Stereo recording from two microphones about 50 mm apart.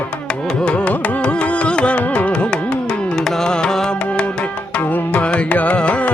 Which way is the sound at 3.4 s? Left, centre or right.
Centre.